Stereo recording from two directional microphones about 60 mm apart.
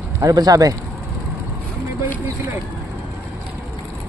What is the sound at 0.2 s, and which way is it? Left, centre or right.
Speech, right.